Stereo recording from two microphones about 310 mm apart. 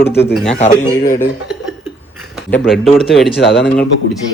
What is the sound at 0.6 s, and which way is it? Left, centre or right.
Speech, left.